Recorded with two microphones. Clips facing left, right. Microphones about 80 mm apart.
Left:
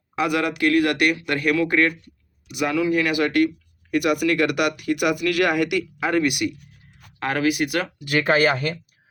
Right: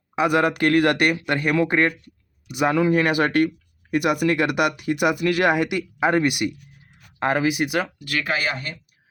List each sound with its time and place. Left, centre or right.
0.2 s speech: right
0.5 s speech: right; by 7.9 s centre
8.0 s speech: left
8.3 s speech: left